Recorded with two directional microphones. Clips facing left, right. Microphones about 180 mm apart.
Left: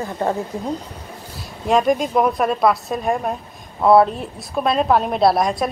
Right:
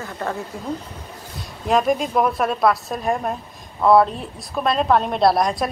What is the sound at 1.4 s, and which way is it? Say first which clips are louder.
A woman's voice: left 2 dB; centre (ahead or behind).